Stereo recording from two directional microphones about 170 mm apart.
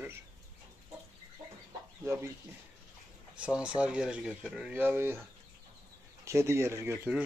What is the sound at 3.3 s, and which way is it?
Speech, 5° right (ahead or behind).